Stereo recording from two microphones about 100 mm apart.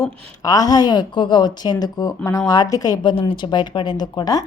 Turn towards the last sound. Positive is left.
turn(degrees=40)  # may be behind; listen again after turning